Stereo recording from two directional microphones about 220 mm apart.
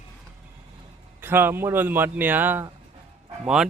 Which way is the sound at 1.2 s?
10° right (ahead or behind).